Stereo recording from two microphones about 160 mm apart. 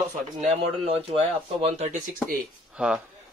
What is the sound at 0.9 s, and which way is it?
Speech, 35° right (ahead or behind).